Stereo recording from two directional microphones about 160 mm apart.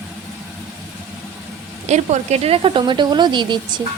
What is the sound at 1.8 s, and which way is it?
A woman's voice, 45° right (ahead or behind).